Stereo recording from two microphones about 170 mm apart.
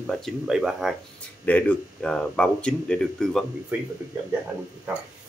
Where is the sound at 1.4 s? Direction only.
10° left (ahead or behind).